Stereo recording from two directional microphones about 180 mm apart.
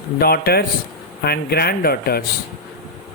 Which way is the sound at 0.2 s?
60° left (ahead or behind).